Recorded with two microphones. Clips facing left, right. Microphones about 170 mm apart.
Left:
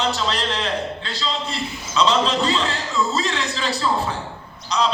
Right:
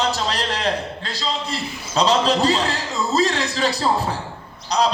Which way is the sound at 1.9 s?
40° right (ahead or behind).